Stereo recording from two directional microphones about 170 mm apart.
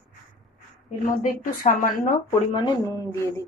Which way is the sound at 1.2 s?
50° left (ahead or behind).